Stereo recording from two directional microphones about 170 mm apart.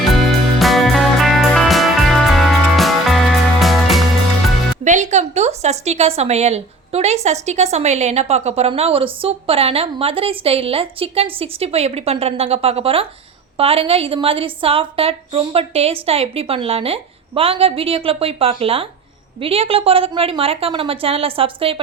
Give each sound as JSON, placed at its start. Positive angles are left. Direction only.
{"t": 0.3, "sound": "music", "side_deg": 0}
{"t": 4.8, "sound": "a woman's voice", "side_deg": -45}